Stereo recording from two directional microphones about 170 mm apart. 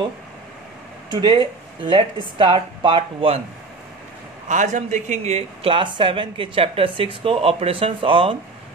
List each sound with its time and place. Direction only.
1.1 s speech: 30° right (ahead or behind)
4.5 s speech: 45° right (ahead or behind); by 8.4 s 30° right (ahead or behind)